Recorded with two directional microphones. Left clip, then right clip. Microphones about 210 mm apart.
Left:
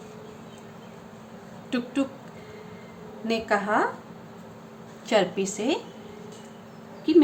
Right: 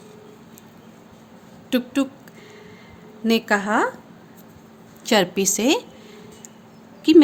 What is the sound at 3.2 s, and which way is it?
Speech, 55° right (ahead or behind).